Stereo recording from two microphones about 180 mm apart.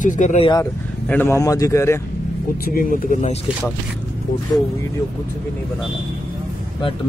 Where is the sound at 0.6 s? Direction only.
10° left (ahead or behind).